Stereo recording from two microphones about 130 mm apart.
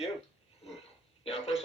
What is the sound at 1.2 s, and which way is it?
Speech, 50° left (ahead or behind).